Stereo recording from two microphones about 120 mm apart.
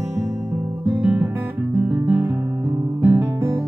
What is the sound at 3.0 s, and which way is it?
Guitar, 15° right (ahead or behind).